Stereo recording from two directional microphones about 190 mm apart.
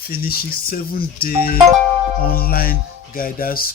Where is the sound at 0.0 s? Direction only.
50° left (ahead or behind).